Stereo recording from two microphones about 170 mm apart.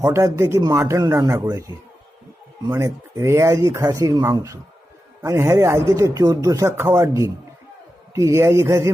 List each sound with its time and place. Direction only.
0.0 s a man's voice: 20° right (ahead or behind)